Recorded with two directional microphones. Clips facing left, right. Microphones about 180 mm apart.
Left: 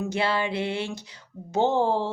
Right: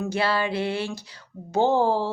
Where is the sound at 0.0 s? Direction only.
20° left (ahead or behind).